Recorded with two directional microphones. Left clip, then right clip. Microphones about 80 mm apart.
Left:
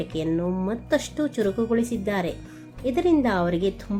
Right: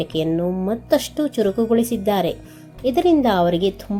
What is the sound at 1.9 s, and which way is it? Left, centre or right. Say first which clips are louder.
A woman's voice: right 7 dB; right.